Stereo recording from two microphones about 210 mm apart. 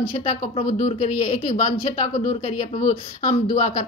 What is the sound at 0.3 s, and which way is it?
Speech, 30° left (ahead or behind).